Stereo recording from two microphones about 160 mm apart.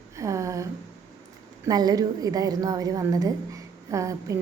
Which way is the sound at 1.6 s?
25° right (ahead or behind).